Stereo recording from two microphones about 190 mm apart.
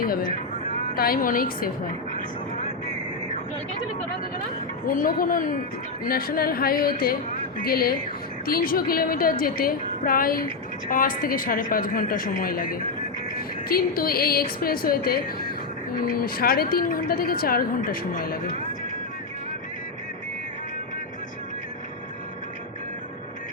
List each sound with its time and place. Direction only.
0.9 s a woman's voice: 50° left (ahead or behind)
4.9 s a woman's voice: 50° left (ahead or behind)
13.7 s a woman's voice: 50° left (ahead or behind)